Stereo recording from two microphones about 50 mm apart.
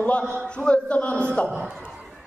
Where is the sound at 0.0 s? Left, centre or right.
Left.